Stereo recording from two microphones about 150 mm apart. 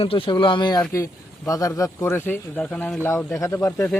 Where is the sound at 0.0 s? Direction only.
35° left (ahead or behind).